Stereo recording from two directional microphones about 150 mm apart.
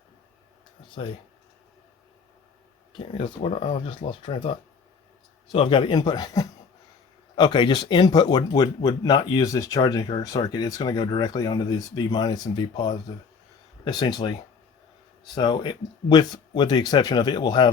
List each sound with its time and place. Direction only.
3.2 s speech: 40° left (ahead or behind)
15.4 s speech: 30° left (ahead or behind)